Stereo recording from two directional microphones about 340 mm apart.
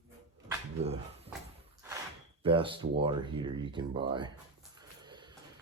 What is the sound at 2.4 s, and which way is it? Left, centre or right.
Speech, centre.